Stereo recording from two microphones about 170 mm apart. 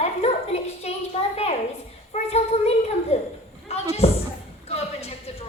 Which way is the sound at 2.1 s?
40° left (ahead or behind).